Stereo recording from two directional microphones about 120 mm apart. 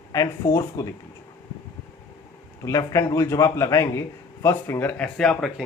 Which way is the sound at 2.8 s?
30° left (ahead or behind).